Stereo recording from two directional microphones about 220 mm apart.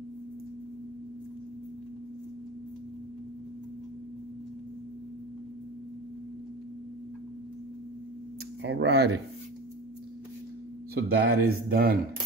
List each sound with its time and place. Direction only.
8.6 s speech: 50° right (ahead or behind)
11.0 s speech: 40° right (ahead or behind)